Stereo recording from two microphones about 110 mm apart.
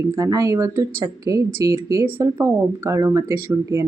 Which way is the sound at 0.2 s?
30° right (ahead or behind).